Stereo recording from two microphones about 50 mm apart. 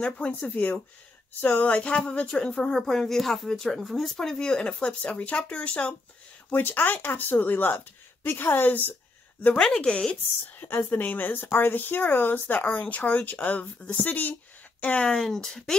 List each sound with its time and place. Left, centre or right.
0.4 s speech: left
6.5 s speech: left
9.8 s speech: left
10.6 s speech: left
15.0 s speech: centre